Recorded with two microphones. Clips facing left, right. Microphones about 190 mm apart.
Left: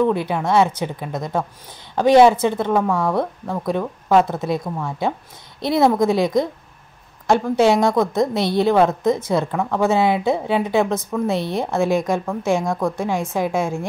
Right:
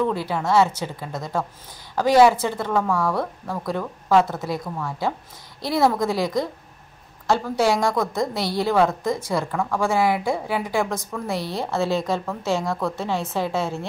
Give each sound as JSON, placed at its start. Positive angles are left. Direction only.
{"t": 0.0, "sound": "a woman's voice", "side_deg": 20}